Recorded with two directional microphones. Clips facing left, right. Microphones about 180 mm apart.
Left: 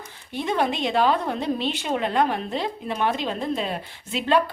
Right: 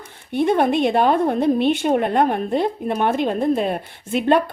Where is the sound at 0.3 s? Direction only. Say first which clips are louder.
Right 7 dB; 55° right (ahead or behind).